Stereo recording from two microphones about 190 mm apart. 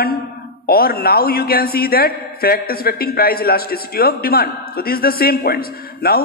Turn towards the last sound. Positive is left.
turn(degrees=55)  # may be behind; listen again after turning